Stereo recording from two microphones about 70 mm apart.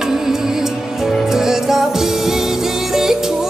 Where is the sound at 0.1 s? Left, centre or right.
Centre.